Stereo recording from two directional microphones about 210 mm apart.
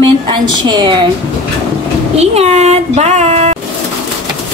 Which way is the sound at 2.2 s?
30° right (ahead or behind).